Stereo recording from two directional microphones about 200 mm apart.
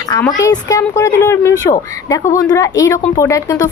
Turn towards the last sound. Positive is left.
turn(degrees=15)  # may be behind; listen again after turning